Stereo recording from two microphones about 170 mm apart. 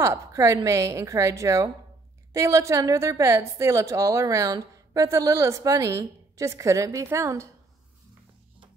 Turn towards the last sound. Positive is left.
turn(degrees=-15)  # may be behind; listen again after turning